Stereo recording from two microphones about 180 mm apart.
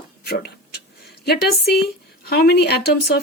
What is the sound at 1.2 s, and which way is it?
Speech, 60° left (ahead or behind).